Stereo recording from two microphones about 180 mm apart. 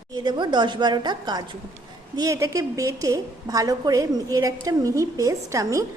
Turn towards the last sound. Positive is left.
turn(degrees=-15)  # may be behind; listen again after turning